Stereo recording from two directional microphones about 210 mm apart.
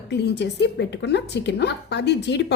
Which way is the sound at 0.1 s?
55° left (ahead or behind).